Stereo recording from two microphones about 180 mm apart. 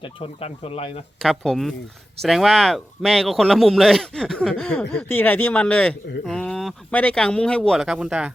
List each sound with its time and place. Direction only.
0.0 s speech: 35° left (ahead or behind)
1.2 s speech: centre (ahead or behind)